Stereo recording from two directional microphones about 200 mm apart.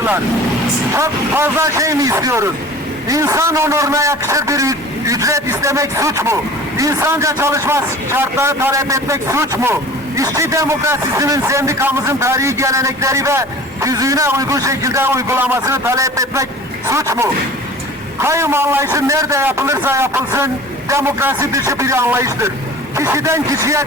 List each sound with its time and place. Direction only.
0.9 s a man's voice: 15° right (ahead or behind)